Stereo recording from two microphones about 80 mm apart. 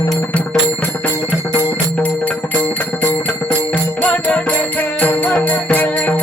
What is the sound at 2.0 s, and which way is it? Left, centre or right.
Music, left.